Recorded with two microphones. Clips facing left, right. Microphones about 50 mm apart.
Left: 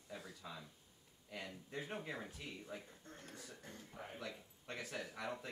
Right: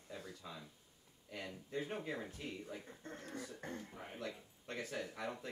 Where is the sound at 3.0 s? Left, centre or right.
Right.